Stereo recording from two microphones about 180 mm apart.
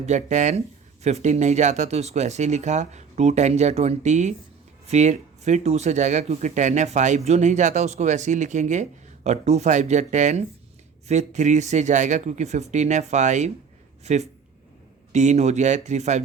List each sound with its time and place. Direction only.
0.0 s speech: 40° right (ahead or behind)